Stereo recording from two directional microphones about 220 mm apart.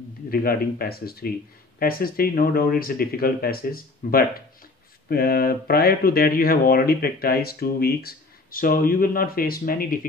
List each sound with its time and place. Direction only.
0.3 s speech: 40° left (ahead or behind)